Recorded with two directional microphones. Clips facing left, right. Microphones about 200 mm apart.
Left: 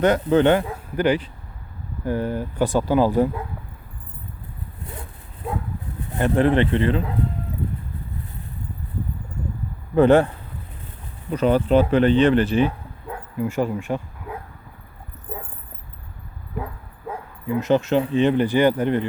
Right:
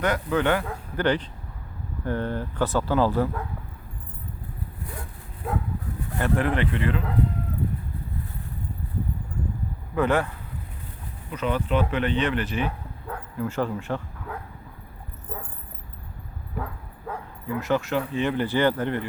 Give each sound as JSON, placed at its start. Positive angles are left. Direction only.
{"t": 0.0, "sound": "speech", "side_deg": 25}
{"t": 6.1, "sound": "speech", "side_deg": 25}
{"t": 9.9, "sound": "speech", "side_deg": 30}
{"t": 13.1, "sound": "bow-wow", "side_deg": 15}
{"t": 17.5, "sound": "speech", "side_deg": 20}